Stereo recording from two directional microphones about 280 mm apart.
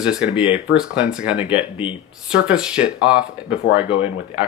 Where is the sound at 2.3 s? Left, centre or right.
Centre.